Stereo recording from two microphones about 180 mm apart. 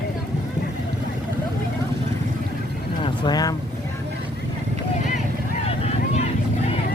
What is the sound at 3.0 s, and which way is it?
Speech, 25° left (ahead or behind).